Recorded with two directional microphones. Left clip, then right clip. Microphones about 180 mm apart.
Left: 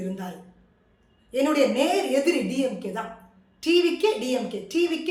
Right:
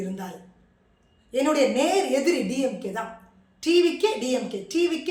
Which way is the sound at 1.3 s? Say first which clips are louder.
Even; 15° right (ahead or behind).